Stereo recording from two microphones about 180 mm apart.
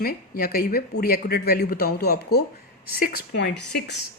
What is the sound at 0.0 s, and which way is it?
Speech, 55° left (ahead or behind).